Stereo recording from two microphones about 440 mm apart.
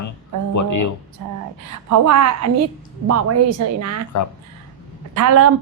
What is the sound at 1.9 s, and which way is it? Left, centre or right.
Speech, right.